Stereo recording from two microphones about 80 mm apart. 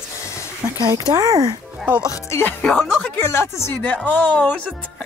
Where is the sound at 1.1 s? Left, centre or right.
Right.